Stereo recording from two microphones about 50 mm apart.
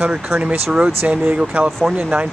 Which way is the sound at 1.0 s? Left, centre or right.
Right.